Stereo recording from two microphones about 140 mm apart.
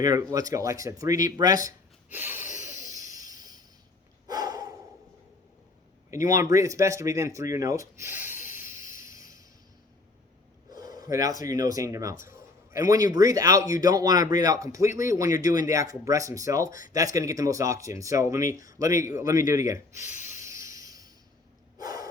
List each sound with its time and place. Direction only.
0.0 s a man's voice: 25° right (ahead or behind)
2.0 s gasp: 15° right (ahead or behind)
2.5 s a sound: 60° left (ahead or behind)
3.1 s a sound: 25° right (ahead or behind)
4.3 s snort: 25° right (ahead or behind)
6.1 s a man's voice: 20° right (ahead or behind)
8.4 s music: 15° right (ahead or behind)
10.8 s a man's voice: 25° right (ahead or behind)
19.1 s snort: 25° right (ahead or behind)
21.8 s gasp: 25° right (ahead or behind)